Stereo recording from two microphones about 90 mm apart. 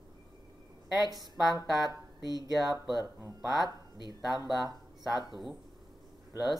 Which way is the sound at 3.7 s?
50° left (ahead or behind).